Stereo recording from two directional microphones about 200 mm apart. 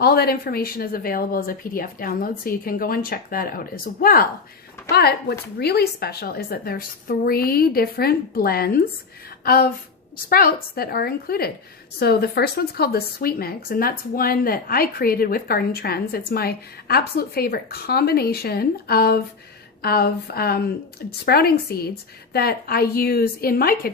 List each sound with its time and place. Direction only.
0.0 s a woman's voice: 50° left (ahead or behind)